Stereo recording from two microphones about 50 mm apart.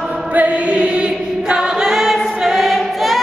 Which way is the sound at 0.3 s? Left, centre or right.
Right.